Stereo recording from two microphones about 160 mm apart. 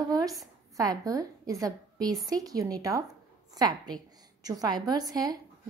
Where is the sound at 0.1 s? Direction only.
20° right (ahead or behind).